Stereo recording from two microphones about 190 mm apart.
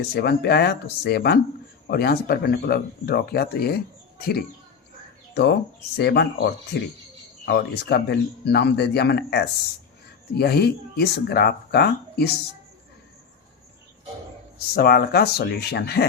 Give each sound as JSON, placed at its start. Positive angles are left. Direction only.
{"t": 0.1, "sound": "speech", "side_deg": 60}
{"t": 14.8, "sound": "speech", "side_deg": 55}